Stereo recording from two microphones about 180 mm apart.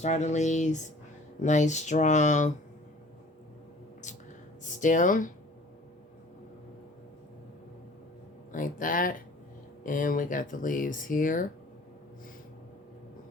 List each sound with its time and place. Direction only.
0.0 s speech: 40° left (ahead or behind)
4.0 s a sound: 40° left (ahead or behind)
4.6 s speech: 45° left (ahead or behind)
8.5 s speech: 50° left (ahead or behind)